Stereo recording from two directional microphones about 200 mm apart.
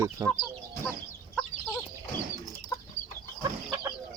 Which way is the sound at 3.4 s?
15° right (ahead or behind).